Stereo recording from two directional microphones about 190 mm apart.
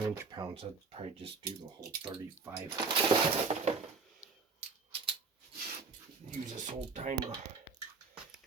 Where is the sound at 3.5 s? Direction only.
30° right (ahead or behind).